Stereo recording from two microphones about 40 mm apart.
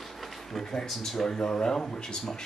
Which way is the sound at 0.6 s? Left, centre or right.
Centre.